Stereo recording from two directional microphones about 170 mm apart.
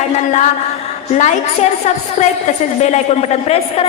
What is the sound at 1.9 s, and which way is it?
A man's voice, 40° left (ahead or behind).